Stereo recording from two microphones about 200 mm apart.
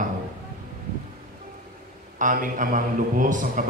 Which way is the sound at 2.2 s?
40° right (ahead or behind).